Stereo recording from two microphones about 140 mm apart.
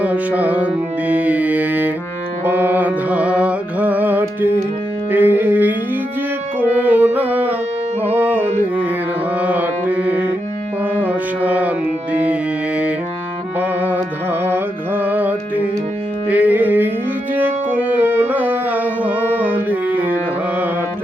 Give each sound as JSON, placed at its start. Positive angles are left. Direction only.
{"t": 0.0, "sound": "music", "side_deg": -10}
{"t": 10.9, "sound": "mantra", "side_deg": -10}
{"t": 12.2, "sound": "music", "side_deg": -10}
{"t": 14.4, "sound": "carnatic music", "side_deg": -15}
{"t": 16.3, "sound": "music", "side_deg": -10}